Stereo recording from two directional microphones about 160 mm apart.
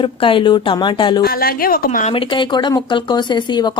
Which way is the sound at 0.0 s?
35° left (ahead or behind).